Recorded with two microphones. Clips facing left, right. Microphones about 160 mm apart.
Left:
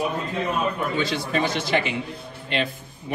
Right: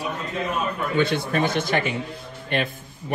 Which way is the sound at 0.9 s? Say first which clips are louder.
Right 2 dB; 55° right (ahead or behind).